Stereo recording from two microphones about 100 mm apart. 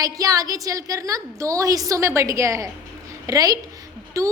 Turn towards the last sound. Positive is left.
turn(degrees=-30)  # may be behind; listen again after turning